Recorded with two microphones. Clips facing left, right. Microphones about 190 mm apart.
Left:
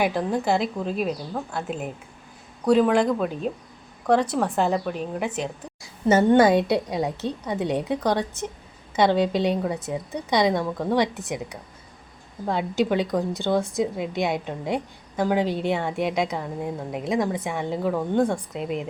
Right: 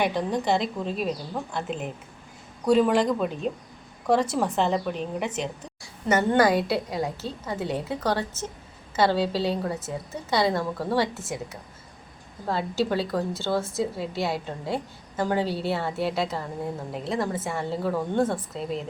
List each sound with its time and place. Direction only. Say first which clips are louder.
0.0 s a woman's voice: left 2 dB; 5° left (ahead or behind)
5.8 s a woman's voice: left 5 dB; 25° left (ahead or behind)
12.5 s a woman's voice: left 3 dB; 15° left (ahead or behind)